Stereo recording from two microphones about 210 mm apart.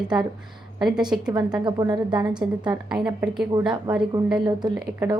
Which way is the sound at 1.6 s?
20° right (ahead or behind).